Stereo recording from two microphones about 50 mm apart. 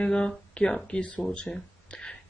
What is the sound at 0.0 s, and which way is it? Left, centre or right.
Speech, centre.